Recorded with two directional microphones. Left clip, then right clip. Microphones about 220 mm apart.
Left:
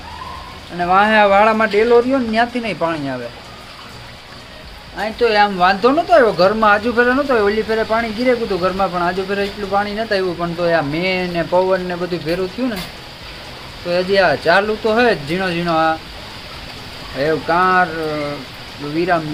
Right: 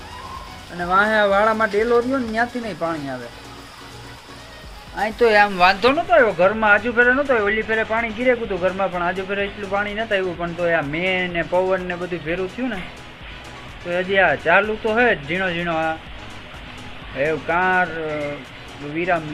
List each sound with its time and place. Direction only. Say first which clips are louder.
0.8 s speech: left 5 dB; centre (ahead or behind)
4.9 s speech: left 1 dB; 35° right (ahead or behind)
6.1 s speech: left 4 dB; 25° left (ahead or behind)
13.9 s speech: left 3 dB; 25° left (ahead or behind)
17.2 s speech: left 4 dB; 15° left (ahead or behind)